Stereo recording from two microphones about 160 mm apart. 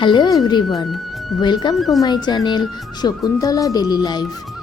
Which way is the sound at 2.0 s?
25° left (ahead or behind).